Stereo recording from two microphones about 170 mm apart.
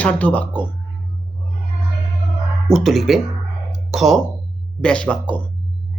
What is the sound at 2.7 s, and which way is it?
Speech, centre (ahead or behind).